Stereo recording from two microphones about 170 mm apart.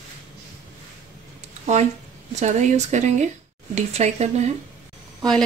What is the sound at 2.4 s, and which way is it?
Speech, 45° right (ahead or behind).